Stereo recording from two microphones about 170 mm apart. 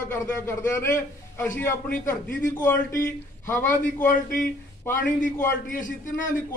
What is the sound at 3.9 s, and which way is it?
Speech, 50° left (ahead or behind).